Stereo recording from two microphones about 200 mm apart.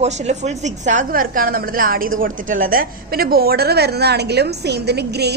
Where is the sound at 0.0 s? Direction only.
35° right (ahead or behind).